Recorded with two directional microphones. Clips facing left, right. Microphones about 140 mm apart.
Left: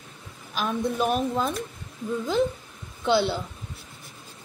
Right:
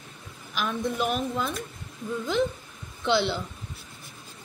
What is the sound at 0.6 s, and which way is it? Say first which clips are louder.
Speech: left 2 dB; 30° left (ahead or behind).